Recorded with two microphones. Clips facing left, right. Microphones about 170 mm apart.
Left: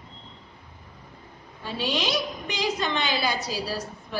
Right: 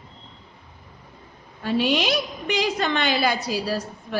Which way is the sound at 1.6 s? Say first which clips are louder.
Right 6 dB; 60° right (ahead or behind).